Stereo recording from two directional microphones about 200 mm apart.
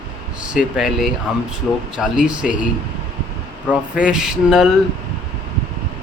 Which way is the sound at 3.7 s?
5° right (ahead or behind).